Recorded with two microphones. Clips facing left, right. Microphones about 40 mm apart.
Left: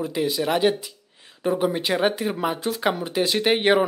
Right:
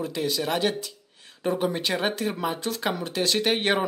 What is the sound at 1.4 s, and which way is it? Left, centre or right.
Speech, centre.